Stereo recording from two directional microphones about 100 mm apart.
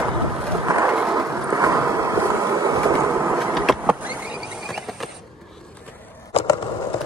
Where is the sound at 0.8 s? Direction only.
15° right (ahead or behind).